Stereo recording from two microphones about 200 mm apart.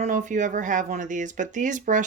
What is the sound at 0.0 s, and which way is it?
Speech, 40° right (ahead or behind).